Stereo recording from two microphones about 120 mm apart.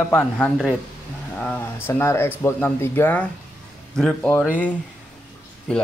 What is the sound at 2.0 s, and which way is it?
Speech, 20° left (ahead or behind).